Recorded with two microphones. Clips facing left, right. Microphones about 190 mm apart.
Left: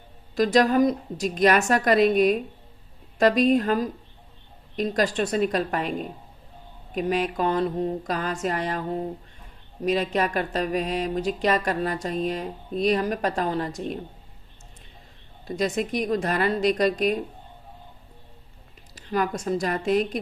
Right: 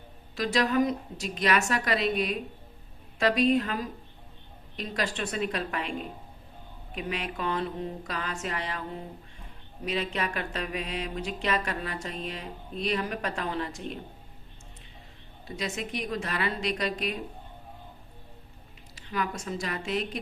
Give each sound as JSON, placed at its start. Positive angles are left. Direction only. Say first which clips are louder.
{"t": 0.3, "sound": "speech", "louder": "left 6 dB", "side_deg": 40}
{"t": 15.4, "sound": "speech", "louder": "left 9 dB", "side_deg": 40}
{"t": 18.9, "sound": "speech", "louder": "left 7 dB", "side_deg": 40}